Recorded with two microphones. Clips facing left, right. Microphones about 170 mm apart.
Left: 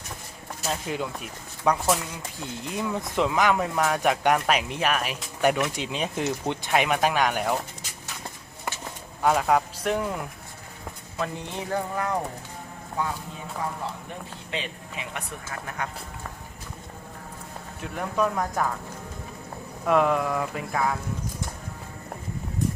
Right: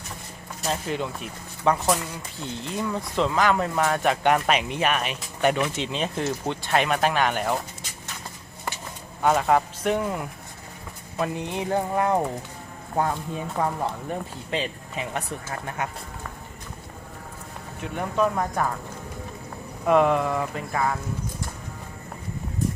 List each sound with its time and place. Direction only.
0.6 s speech: 5° left (ahead or behind)
2.7 s speech: 15° left (ahead or behind)
3.5 s speech: centre (ahead or behind)
9.2 s speech: centre (ahead or behind)
11.2 s speech: 15° right (ahead or behind)
13.0 s speech: 50° right (ahead or behind)
14.5 s speech: 35° right (ahead or behind)
15.8 s speech: 20° right (ahead or behind)
17.9 s speech: 5° right (ahead or behind)
19.8 s speech: centre (ahead or behind)